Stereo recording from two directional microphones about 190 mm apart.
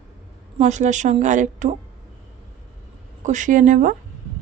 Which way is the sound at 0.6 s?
40° right (ahead or behind).